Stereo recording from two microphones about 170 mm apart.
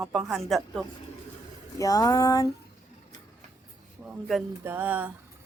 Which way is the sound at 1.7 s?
20° left (ahead or behind).